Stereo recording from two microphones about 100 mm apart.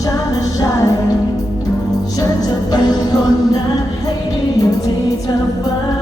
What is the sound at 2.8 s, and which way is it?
Music, 40° left (ahead or behind).